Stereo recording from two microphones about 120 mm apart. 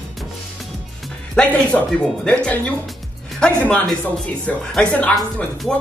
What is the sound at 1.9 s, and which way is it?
Speech, 5° left (ahead or behind).